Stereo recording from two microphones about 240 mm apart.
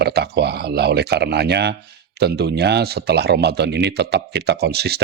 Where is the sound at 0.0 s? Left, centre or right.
Right.